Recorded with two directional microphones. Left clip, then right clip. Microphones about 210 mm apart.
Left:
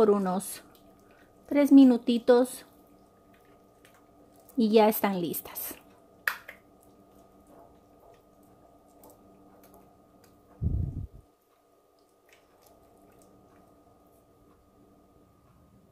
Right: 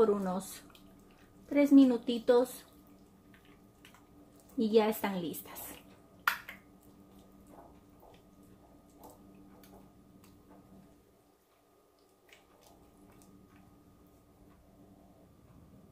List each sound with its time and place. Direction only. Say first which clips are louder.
0.0 s a woman's voice: left 5 dB; 55° left (ahead or behind)
4.6 s a woman's voice: left 6 dB; 60° left (ahead or behind)